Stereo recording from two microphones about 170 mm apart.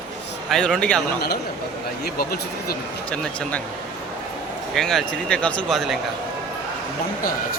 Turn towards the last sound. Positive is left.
turn(degrees=0)  # may be behind; listen again after turning